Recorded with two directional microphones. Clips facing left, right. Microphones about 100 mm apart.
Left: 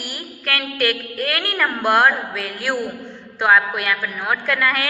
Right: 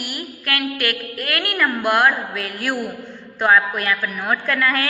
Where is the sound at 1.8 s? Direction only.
30° left (ahead or behind).